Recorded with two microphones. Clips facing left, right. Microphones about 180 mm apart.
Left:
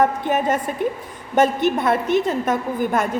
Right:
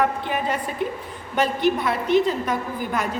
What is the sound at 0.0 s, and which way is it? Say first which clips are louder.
A woman's voice: left 4 dB; 45° left (ahead or behind).